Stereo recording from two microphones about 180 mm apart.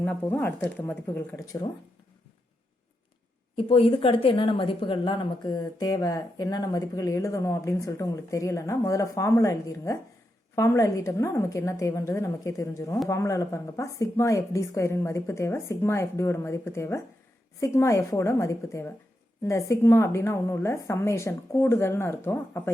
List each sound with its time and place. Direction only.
0.0 s speech: 10° left (ahead or behind)
3.6 s a woman's voice: 30° left (ahead or behind); by 22.7 s 15° left (ahead or behind)